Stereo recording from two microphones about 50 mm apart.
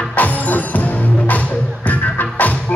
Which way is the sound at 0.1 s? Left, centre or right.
Left.